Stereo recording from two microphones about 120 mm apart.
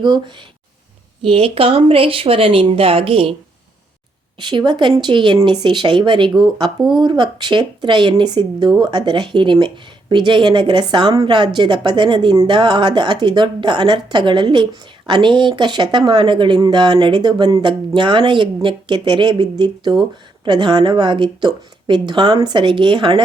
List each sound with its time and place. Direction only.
0.0 s speech: 40° right (ahead or behind)
4.4 s speech: 40° right (ahead or behind)